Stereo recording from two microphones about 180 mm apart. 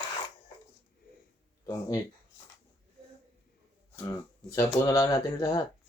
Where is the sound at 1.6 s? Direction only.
20° left (ahead or behind).